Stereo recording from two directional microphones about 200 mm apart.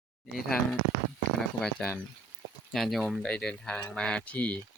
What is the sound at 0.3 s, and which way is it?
Speech, centre (ahead or behind).